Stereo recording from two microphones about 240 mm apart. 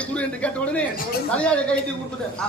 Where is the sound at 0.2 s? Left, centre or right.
Centre.